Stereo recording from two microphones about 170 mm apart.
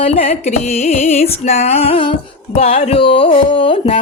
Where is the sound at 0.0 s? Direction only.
35° left (ahead or behind).